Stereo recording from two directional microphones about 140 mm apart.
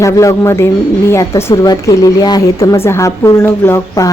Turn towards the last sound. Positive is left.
turn(degrees=20)  # may be behind; listen again after turning